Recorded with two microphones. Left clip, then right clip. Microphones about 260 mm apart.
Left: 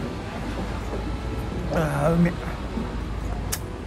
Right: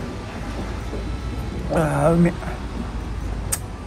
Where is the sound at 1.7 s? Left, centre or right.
Centre.